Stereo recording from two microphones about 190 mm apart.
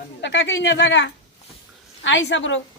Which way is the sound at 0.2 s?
70° left (ahead or behind).